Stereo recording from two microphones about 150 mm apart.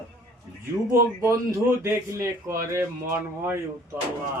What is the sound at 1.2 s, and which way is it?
Speech, 20° right (ahead or behind).